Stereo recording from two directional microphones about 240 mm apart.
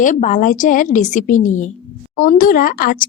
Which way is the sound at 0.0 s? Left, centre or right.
Left.